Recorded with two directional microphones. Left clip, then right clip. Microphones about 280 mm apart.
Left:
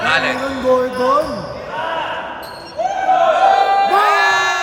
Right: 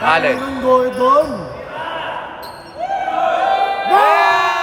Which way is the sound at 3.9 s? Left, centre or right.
Right.